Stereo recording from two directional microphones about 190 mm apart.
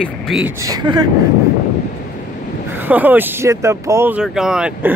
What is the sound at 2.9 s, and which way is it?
Speech, 10° right (ahead or behind).